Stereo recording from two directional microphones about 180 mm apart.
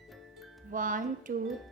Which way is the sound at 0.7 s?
50° right (ahead or behind).